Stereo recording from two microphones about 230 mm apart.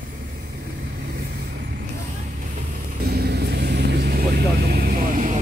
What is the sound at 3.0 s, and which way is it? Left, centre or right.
Vehicle, right.